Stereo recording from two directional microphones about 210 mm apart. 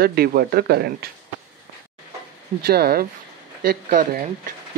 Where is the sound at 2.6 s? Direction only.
45° right (ahead or behind).